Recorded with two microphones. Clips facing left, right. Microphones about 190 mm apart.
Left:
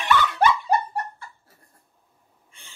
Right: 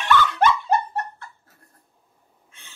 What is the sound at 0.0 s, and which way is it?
Snicker, 10° left (ahead or behind).